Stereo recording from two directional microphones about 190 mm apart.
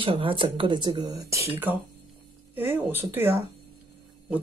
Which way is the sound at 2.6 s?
10° right (ahead or behind).